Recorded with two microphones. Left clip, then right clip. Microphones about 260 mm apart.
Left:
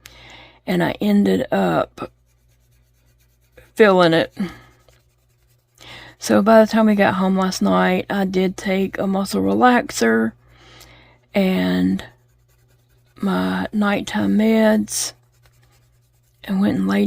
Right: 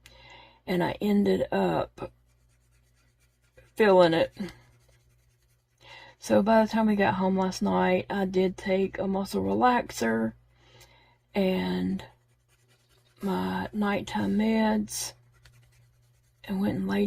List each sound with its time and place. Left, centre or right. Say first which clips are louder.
0.0 s speech: left 9 dB; left
3.5 s speech: left 7 dB; left
5.8 s speech: left 12 dB; left
13.1 s speech: left 8 dB; left
16.4 s speech: left 10 dB; left